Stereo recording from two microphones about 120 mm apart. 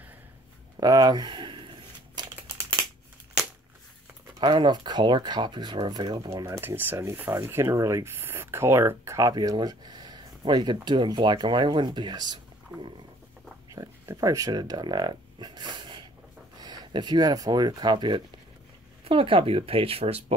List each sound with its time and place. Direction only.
0.7 s a sound: 35° right (ahead or behind)
4.4 s speech: 40° right (ahead or behind)
6.3 s speech: 25° right (ahead or behind)
13.7 s speech: 30° right (ahead or behind); by 20.3 s 60° right (ahead or behind)